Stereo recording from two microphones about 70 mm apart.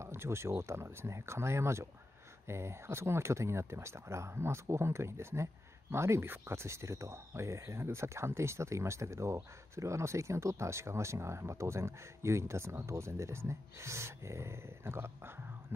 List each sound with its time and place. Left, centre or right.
0.0 s speech: right